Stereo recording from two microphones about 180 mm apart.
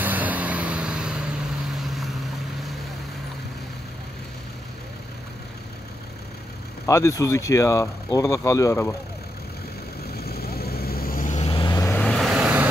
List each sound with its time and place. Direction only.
0.0 s vehicle: 10° right (ahead or behind)
6.9 s speech: 15° left (ahead or behind)
10.1 s vehicle: 60° left (ahead or behind)
11.4 s vehicle: 25° left (ahead or behind)
12.0 s vehicle: centre (ahead or behind)